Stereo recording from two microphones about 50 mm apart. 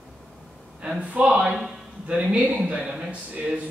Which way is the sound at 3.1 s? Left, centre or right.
Right.